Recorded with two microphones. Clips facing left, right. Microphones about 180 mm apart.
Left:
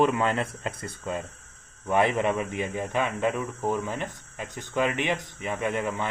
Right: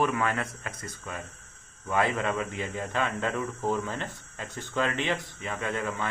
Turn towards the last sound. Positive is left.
turn(degrees=20)  # may be behind; listen again after turning